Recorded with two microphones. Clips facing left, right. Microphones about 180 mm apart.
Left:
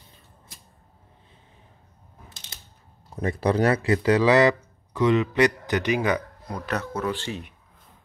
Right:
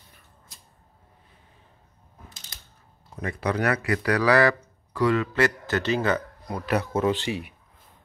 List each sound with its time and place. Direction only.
3.2 s speech: 35° left (ahead or behind); by 6.2 s 15° left (ahead or behind)
6.4 s speech: 5° right (ahead or behind)
6.9 s speech: 20° right (ahead or behind)